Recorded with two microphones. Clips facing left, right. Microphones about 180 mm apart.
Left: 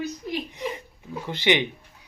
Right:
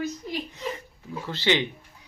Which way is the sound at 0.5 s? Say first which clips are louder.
Left 2 dB; 20° left (ahead or behind).